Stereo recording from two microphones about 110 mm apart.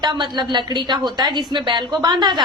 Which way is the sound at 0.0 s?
40° right (ahead or behind).